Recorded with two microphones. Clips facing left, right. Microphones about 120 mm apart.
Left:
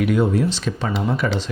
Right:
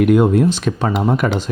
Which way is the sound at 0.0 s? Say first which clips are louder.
Right 6 dB; 50° right (ahead or behind).